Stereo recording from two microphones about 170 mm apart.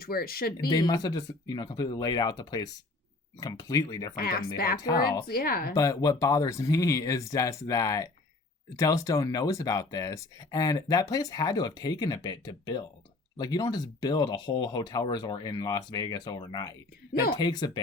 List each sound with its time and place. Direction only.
0.0 s speech: 60° left (ahead or behind)
0.7 s speech: 20° left (ahead or behind)
4.1 s speech: 60° left (ahead or behind)
4.8 s speech: 20° left (ahead or behind)
5.3 s speech: 60° left (ahead or behind)
5.7 s speech: 20° left (ahead or behind)